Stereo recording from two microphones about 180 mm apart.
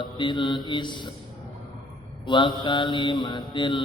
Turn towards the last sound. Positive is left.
turn(degrees=25)  # may be behind; listen again after turning